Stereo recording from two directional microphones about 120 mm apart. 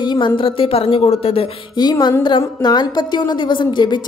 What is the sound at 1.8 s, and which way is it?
A woman's voice, 35° left (ahead or behind).